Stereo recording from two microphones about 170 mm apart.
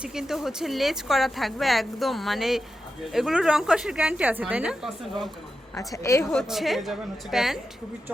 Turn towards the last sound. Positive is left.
turn(degrees=0)  # may be behind; listen again after turning